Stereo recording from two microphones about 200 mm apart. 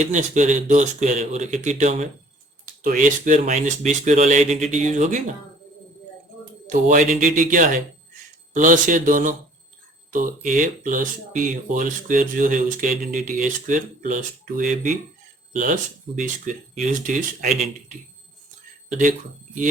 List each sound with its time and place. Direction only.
0.0 s speech: 35° right (ahead or behind)
6.7 s speech: 40° right (ahead or behind)
18.9 s speech: 40° right (ahead or behind)